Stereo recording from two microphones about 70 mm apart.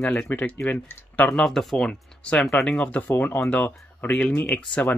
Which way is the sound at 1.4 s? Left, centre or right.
Centre.